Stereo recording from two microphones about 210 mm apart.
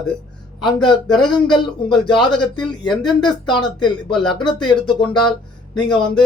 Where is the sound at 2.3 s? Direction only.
5° left (ahead or behind).